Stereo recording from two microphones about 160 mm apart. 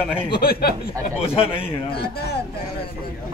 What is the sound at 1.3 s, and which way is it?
Speech, 35° left (ahead or behind).